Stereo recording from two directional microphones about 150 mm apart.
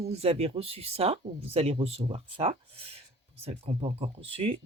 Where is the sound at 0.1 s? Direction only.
45° right (ahead or behind).